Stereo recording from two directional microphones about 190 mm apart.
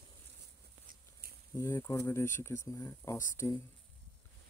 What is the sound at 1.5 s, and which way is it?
Speech, 15° left (ahead or behind).